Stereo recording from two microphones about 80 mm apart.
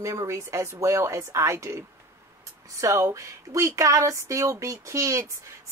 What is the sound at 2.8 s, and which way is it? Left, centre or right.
Speech, right.